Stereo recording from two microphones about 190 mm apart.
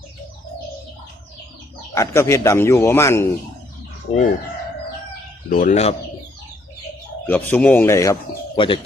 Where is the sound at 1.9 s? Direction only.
15° left (ahead or behind).